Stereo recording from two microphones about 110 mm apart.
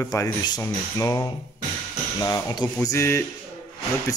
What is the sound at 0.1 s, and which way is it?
A man's voice, 35° left (ahead or behind).